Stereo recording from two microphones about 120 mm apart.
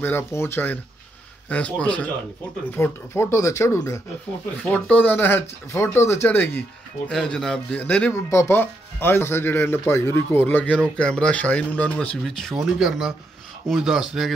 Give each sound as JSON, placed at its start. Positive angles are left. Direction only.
{"t": 0.0, "sound": "speech", "side_deg": 20}
{"t": 2.7, "sound": "speech", "side_deg": 20}
{"t": 4.6, "sound": "speech", "side_deg": 10}
{"t": 8.1, "sound": "speech", "side_deg": 20}